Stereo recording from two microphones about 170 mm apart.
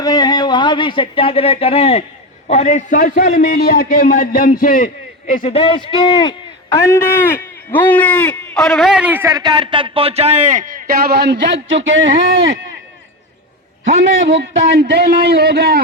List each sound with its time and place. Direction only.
0.0 s a man's voice: 25° left (ahead or behind); by 12.5 s 90° right
14.8 s a man's voice: 70° right (ahead or behind)